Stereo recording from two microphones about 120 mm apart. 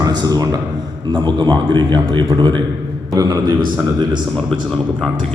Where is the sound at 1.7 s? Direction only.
40° right (ahead or behind).